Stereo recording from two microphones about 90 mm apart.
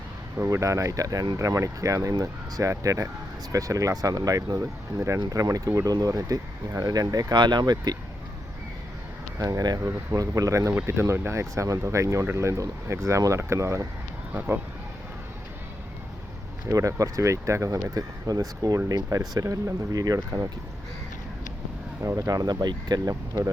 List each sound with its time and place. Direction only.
0.4 s speech: 35° right (ahead or behind)
5.2 s speech: 40° right (ahead or behind)
9.4 s speech: 40° right (ahead or behind)
10.7 s speech: 25° right (ahead or behind)
14.3 s speech: 20° right (ahead or behind)
16.7 s speech: 40° right (ahead or behind)
17.9 s speech: 40° right (ahead or behind)
22.0 s speech: 40° right (ahead or behind)